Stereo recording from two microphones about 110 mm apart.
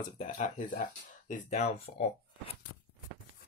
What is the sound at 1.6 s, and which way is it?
Speech, 75° left (ahead or behind).